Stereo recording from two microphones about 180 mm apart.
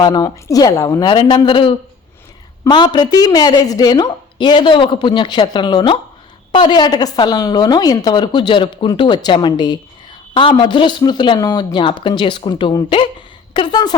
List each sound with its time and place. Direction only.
0.0 s a woman's voice: 20° left (ahead or behind)